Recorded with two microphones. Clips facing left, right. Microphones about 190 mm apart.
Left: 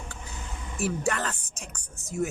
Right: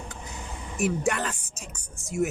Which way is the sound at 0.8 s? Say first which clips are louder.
Right 2 dB; 15° right (ahead or behind).